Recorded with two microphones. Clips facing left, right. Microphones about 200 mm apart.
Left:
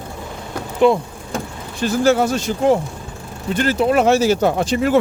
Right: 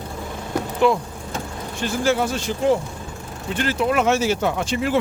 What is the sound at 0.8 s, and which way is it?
Speech, 20° left (ahead or behind).